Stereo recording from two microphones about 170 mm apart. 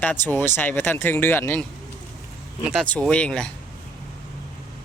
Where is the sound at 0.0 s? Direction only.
10° left (ahead or behind).